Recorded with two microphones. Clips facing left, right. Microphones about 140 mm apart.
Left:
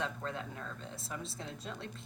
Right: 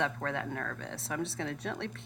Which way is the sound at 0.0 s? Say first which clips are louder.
Right 5 dB; 70° right (ahead or behind).